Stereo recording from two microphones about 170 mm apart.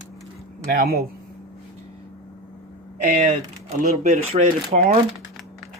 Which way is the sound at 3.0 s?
55° right (ahead or behind).